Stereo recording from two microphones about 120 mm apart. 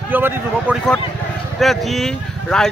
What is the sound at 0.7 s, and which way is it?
Speech, 5° left (ahead or behind).